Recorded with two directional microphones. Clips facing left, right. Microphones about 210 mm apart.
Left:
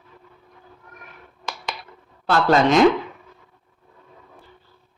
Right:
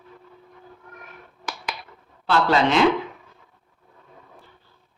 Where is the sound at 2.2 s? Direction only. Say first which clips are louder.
Left 2 dB; 45° left (ahead or behind).